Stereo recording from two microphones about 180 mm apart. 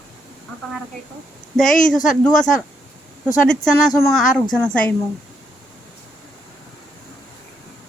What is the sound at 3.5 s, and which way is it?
A woman's voice, 5° left (ahead or behind).